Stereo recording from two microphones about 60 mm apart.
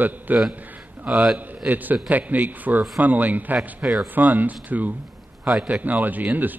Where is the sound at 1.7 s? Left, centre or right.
Right.